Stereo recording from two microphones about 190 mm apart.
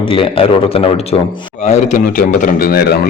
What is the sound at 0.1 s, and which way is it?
A man's voice, 30° left (ahead or behind).